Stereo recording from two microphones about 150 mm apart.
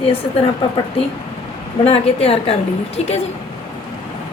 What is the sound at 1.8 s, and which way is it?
A woman's voice, 40° left (ahead or behind).